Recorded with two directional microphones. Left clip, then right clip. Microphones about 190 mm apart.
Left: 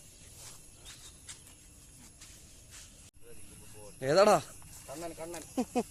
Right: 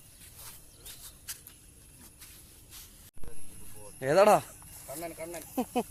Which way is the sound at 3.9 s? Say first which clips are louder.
Right 2 dB; centre (ahead or behind).